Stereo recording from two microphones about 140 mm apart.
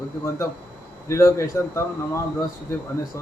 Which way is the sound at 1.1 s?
20° left (ahead or behind).